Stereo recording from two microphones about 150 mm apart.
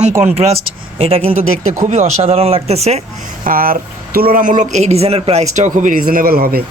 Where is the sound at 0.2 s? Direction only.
45° right (ahead or behind).